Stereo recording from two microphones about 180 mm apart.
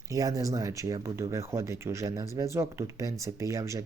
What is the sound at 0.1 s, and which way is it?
Speech, 20° right (ahead or behind).